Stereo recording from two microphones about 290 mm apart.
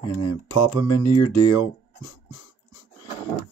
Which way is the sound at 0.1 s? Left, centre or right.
Left.